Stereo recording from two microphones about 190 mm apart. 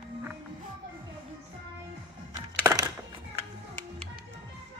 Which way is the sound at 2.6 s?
10° right (ahead or behind).